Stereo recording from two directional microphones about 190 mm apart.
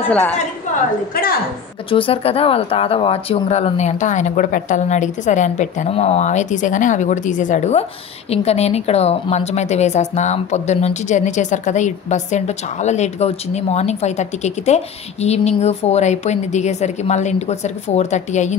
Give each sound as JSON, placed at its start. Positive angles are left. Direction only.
{"t": 0.1, "sound": "a woman's voice", "side_deg": 5}
{"t": 1.9, "sound": "a woman's voice", "side_deg": 30}